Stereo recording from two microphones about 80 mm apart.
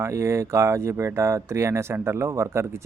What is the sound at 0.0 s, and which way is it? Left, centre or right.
Speech, right.